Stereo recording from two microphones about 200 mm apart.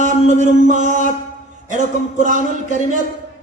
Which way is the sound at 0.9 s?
40° left (ahead or behind).